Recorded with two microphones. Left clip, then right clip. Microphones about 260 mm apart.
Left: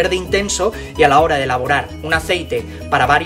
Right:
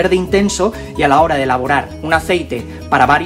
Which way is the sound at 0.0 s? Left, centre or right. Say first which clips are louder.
Right 3 dB; centre.